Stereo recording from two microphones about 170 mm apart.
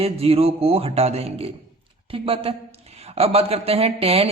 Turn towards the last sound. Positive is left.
turn(degrees=-35)  # may be behind; listen again after turning